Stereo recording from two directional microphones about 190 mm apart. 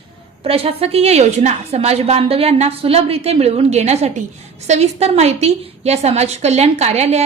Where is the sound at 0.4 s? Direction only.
30° right (ahead or behind).